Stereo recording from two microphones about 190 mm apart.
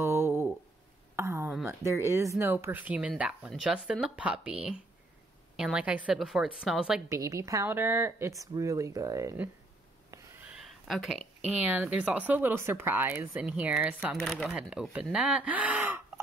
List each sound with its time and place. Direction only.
0.0 s a sound: 15° right (ahead or behind)
1.9 s speech: 15° right (ahead or behind)
7.1 s speech: 15° right (ahead or behind)
10.1 s snort: 15° right (ahead or behind)
10.6 s speech: centre (ahead or behind)